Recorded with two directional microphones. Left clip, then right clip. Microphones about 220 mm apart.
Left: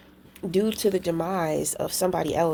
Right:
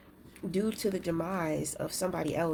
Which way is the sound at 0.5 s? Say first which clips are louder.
Left 9 dB; 40° left (ahead or behind).